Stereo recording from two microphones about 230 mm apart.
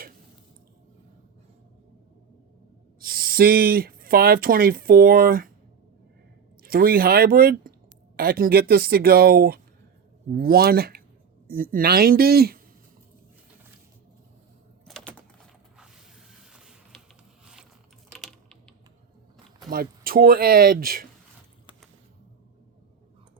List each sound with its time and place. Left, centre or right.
3.0 s speech: right
6.6 s speech: right
14.8 s a sound: centre
16.5 s mechanisms: centre
18.1 s typing: centre
19.7 s speech: right